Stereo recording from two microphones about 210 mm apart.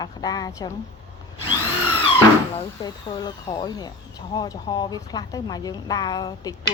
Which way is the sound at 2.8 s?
20° left (ahead or behind).